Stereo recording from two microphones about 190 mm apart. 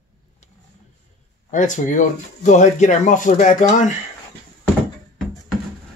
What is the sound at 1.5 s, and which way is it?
Speech, 40° left (ahead or behind).